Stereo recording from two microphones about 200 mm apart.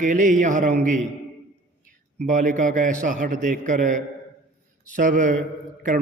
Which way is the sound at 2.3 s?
40° right (ahead or behind).